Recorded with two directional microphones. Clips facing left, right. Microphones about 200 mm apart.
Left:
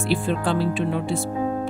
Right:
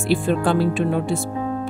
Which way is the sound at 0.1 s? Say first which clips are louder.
Right 4 dB; 50° right (ahead or behind).